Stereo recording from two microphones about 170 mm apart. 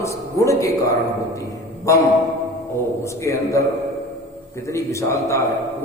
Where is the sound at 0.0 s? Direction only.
15° left (ahead or behind).